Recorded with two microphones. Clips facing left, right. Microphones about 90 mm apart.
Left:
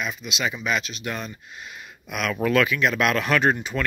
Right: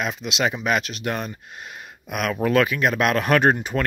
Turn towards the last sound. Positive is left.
turn(degrees=-50)  # may be behind; listen again after turning